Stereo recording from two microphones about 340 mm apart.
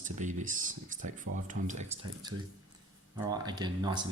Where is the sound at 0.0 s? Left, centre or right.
Right.